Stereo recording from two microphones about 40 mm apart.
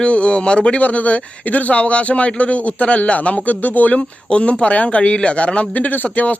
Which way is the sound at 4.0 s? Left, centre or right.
Left.